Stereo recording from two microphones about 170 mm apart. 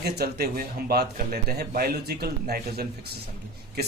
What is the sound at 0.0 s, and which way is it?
A man's voice, 70° right (ahead or behind).